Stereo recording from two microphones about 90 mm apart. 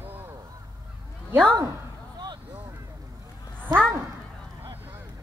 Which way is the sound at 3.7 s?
50° right (ahead or behind).